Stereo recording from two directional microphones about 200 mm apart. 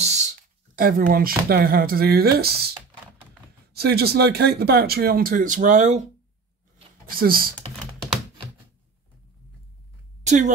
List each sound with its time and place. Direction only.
0.0 s speech: 35° right (ahead or behind); by 2.7 s 50° right (ahead or behind)
3.7 s speech: 50° right (ahead or behind); by 6.0 s 35° right (ahead or behind)
7.1 s speech: 45° right (ahead or behind)
10.2 s a woman's voice: 35° right (ahead or behind)